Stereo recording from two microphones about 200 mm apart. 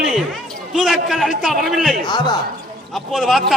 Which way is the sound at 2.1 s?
20° left (ahead or behind).